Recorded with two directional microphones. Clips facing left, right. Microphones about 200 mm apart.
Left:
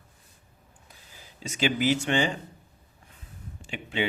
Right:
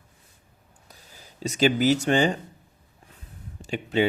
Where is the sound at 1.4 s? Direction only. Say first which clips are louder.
Right 5 dB; 40° right (ahead or behind).